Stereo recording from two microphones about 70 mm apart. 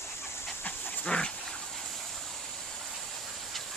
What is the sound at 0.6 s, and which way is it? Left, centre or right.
Dog, centre.